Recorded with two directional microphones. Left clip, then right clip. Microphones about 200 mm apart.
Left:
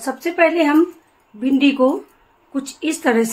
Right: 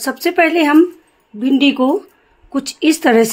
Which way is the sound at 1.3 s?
45° right (ahead or behind).